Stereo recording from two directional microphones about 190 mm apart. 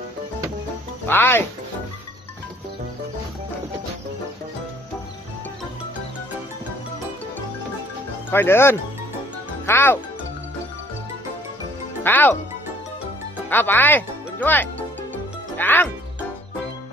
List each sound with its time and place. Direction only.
1.0 s speech: 10° left (ahead or behind)
8.3 s speech: 10° left (ahead or behind)
12.0 s speech: 10° left (ahead or behind)
13.5 s speech: 10° left (ahead or behind)
15.5 s music: 10° left (ahead or behind)